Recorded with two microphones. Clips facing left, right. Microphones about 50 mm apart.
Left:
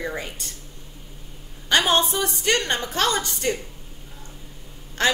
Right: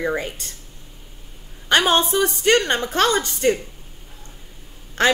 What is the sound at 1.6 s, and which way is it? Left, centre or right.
A woman's voice, right.